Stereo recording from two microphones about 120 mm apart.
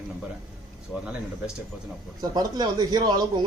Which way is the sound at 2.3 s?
35° right (ahead or behind).